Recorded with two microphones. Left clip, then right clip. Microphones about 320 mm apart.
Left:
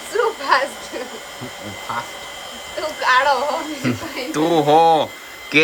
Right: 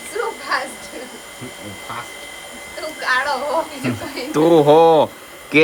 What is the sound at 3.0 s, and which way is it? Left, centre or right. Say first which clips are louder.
Synthetic singing: left 4 dB; centre.